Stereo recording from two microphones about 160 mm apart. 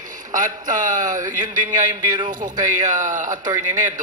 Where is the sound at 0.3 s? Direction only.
55° right (ahead or behind).